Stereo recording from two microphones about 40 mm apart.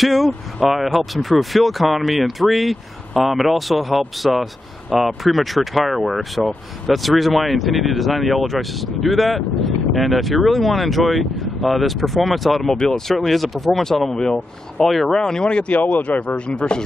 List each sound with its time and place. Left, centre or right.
0.0 s speech: centre
12.6 s speech: centre
14.1 s speech: centre
14.8 s speech: centre
15.1 s speech: centre
15.7 s speech: left
16.3 s speech: left